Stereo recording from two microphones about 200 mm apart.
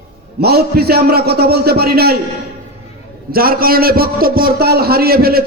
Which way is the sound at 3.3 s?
45° right (ahead or behind).